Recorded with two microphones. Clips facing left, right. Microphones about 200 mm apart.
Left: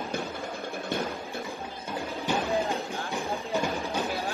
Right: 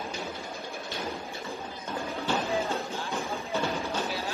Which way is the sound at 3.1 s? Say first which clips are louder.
Left 2 dB; 15° left (ahead or behind).